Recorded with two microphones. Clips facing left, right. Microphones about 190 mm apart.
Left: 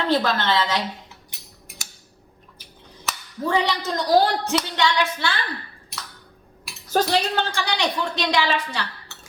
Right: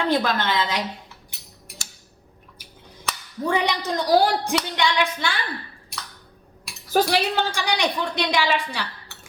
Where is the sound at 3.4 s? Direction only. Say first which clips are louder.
Even; 15° right (ahead or behind).